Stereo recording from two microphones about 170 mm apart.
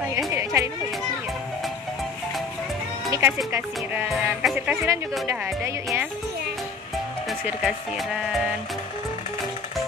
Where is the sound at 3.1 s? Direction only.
15° right (ahead or behind).